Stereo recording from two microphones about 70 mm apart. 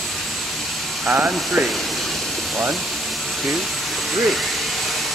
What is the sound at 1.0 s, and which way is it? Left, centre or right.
Speech, right.